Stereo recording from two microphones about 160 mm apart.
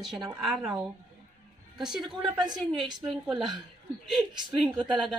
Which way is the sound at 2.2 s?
25° right (ahead or behind).